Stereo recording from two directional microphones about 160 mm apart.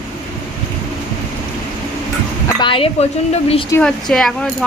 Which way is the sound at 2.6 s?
35° left (ahead or behind).